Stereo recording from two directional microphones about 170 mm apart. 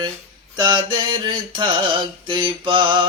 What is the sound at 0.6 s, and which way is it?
Music, 25° right (ahead or behind).